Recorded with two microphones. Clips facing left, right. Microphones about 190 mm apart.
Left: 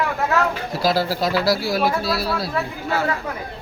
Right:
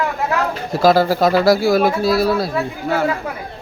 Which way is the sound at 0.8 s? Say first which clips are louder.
Right 8 dB; 50° right (ahead or behind).